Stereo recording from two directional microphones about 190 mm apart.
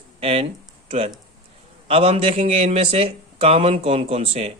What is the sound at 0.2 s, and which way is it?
Speech, 30° right (ahead or behind).